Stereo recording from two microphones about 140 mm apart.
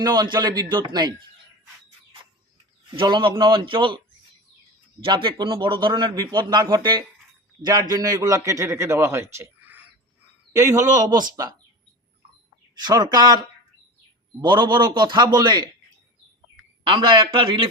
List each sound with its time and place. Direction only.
0.0 s a man's voice: 30° right (ahead or behind)
2.9 s a man's voice: 40° right (ahead or behind)
5.0 s a man's voice: 35° right (ahead or behind)
12.7 s a man's voice: 30° right (ahead or behind)
16.8 s a man's voice: 35° right (ahead or behind)